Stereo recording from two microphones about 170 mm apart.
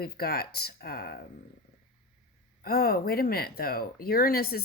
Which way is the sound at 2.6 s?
65° left (ahead or behind).